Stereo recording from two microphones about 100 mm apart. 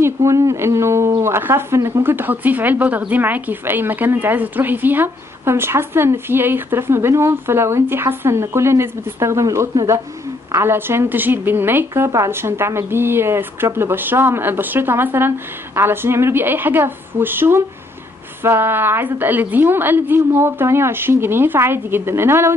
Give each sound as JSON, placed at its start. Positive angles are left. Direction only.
{"t": 0.0, "sound": "speech", "side_deg": -30}
{"t": 10.5, "sound": "speech", "side_deg": -25}